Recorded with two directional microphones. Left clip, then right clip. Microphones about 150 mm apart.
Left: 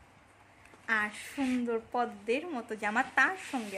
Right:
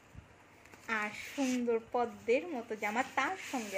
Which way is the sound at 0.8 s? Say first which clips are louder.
Left 5 dB; 35° left (ahead or behind).